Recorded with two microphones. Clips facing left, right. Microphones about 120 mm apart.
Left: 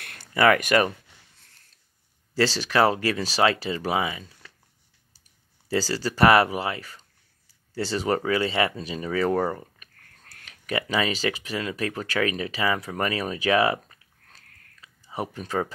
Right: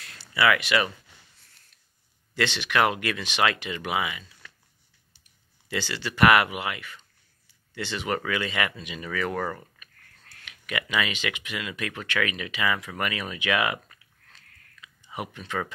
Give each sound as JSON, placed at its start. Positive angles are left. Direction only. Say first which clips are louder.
{"t": 0.0, "sound": "speech", "louder": "left 4 dB", "side_deg": 55}
{"t": 2.3, "sound": "speech", "louder": "left 3 dB", "side_deg": 35}
{"t": 5.7, "sound": "speech", "louder": "left 6 dB", "side_deg": 35}